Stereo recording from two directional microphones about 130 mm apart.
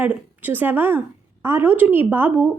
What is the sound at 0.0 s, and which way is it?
A woman's voice, 15° right (ahead or behind).